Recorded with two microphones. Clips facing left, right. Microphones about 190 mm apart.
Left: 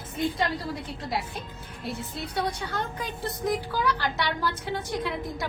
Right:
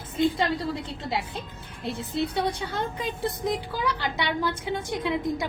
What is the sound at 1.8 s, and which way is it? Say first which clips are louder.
A woman's voice: right 6 dB; 25° right (ahead or behind).